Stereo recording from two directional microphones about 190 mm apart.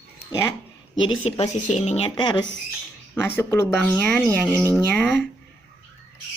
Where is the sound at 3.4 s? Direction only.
10° left (ahead or behind).